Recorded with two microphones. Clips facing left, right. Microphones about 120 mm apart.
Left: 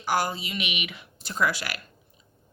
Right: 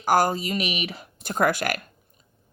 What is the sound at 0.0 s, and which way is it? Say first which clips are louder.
Speech: right 6 dB; 45° right (ahead or behind).